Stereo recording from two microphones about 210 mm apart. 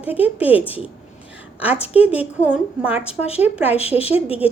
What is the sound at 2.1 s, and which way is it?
A woman's voice, 5° right (ahead or behind).